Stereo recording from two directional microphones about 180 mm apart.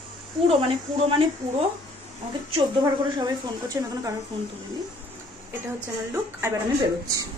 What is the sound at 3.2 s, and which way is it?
Speech, 20° right (ahead or behind).